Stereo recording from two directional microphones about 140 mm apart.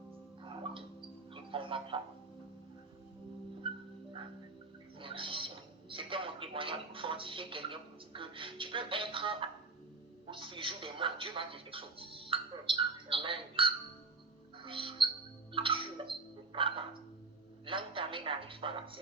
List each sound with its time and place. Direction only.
0.4 s music: 40° right (ahead or behind)
3.6 s dog: 40° right (ahead or behind)
4.9 s music: 40° right (ahead or behind)
5.9 s speech: 40° right (ahead or behind)
14.6 s music: 40° right (ahead or behind)
15.5 s a sound: 40° right (ahead or behind)
17.7 s speech: 40° right (ahead or behind)